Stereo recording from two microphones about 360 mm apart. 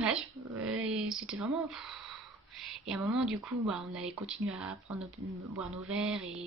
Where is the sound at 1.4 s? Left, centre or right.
Centre.